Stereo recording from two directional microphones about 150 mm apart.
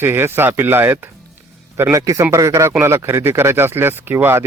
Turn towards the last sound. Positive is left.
turn(degrees=-15)  # may be behind; listen again after turning